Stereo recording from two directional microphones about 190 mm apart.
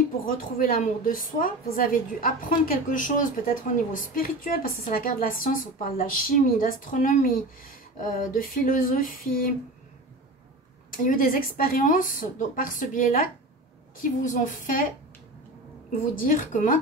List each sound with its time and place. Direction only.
0.2 s a woman's voice: 50° left (ahead or behind)
11.1 s a woman's voice: 50° left (ahead or behind)
16.2 s a woman's voice: 45° left (ahead or behind)